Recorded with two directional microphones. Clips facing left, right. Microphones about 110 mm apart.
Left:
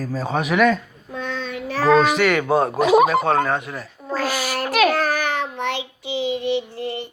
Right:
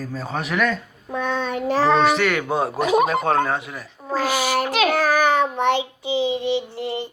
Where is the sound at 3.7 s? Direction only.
15° right (ahead or behind).